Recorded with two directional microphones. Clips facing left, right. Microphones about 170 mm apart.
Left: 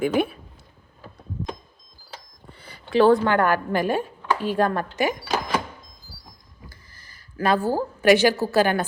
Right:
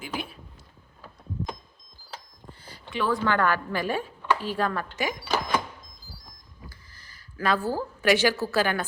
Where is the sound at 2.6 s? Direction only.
65° left (ahead or behind).